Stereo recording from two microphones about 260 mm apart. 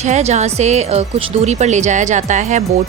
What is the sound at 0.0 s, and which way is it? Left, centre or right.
Speech, right.